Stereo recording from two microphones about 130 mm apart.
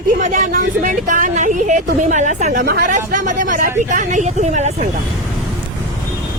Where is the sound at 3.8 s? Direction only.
70° right (ahead or behind).